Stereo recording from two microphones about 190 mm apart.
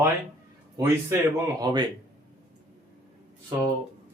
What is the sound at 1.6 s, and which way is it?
Speech, 20° right (ahead or behind).